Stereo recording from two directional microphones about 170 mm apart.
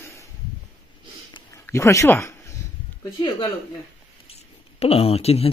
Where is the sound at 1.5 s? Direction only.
15° left (ahead or behind).